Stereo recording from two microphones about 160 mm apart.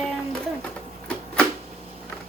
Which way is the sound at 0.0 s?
5° left (ahead or behind).